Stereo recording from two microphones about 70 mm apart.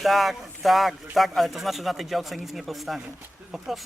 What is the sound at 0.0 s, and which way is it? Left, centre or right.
A man's voice, centre.